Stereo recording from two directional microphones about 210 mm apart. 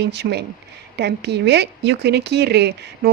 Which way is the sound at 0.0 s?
50° right (ahead or behind).